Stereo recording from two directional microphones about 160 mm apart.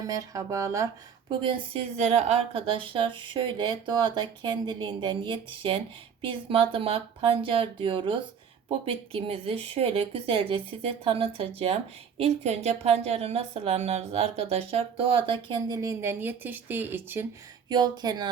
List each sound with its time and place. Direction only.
0.0 s speech: 20° right (ahead or behind)
1.3 s speech: 30° right (ahead or behind)
2.0 s speech: 45° right (ahead or behind); by 17.2 s 15° right (ahead or behind)
17.7 s speech: 25° right (ahead or behind)